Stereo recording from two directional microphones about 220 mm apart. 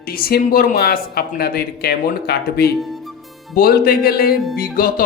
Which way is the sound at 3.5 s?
45° left (ahead or behind).